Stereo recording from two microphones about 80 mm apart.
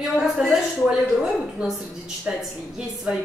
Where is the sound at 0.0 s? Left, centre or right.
Centre.